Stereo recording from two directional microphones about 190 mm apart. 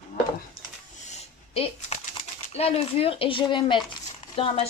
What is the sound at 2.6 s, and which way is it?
Speech, 30° left (ahead or behind).